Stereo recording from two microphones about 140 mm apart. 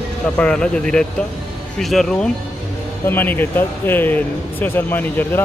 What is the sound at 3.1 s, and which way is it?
Speech, 15° left (ahead or behind).